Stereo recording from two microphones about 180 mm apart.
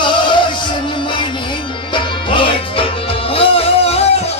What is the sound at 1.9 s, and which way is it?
Music, 30° left (ahead or behind).